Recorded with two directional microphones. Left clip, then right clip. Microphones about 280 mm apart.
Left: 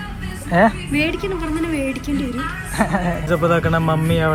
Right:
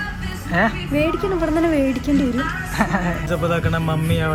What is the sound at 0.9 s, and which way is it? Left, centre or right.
Speech, centre.